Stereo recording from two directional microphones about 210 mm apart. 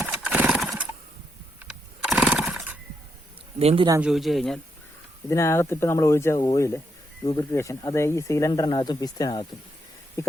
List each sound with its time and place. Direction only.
0.0 s horse: 5° right (ahead or behind)
1.6 s a sound: centre (ahead or behind)
3.6 s speech: 30° right (ahead or behind)
4.0 s speech: centre (ahead or behind)
5.3 s speech: 15° left (ahead or behind)